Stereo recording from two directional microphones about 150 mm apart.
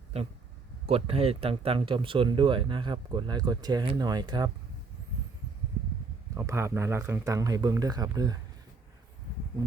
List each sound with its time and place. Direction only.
0.9 s speech: 40° right (ahead or behind)
6.3 s speech: 20° right (ahead or behind)